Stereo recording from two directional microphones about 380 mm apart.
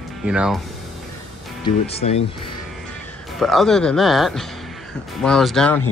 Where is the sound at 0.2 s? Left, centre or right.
Centre.